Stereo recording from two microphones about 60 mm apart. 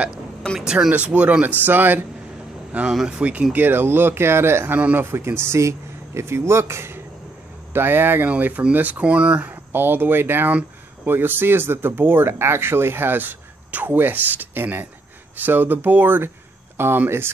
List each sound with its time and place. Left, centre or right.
0.6 s speech: centre
1.6 s speech: right
2.7 s speech: right
3.5 s speech: right
7.7 s speech: right
9.7 s speech: right